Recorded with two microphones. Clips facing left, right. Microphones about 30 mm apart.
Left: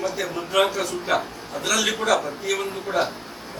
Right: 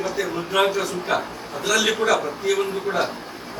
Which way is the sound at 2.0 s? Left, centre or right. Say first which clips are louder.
Right 1 dB; centre.